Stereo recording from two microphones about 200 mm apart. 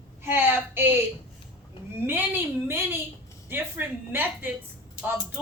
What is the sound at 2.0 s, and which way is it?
A woman's voice, 10° right (ahead or behind).